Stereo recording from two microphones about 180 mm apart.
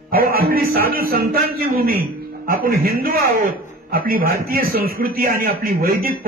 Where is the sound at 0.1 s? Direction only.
55° right (ahead or behind).